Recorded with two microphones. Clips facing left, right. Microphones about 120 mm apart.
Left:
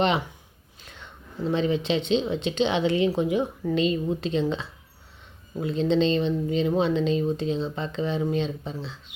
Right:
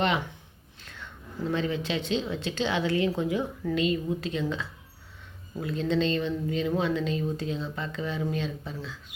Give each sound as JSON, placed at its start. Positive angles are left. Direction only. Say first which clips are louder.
{"t": 0.9, "sound": "a woman's voice", "louder": "right 1 dB", "side_deg": 20}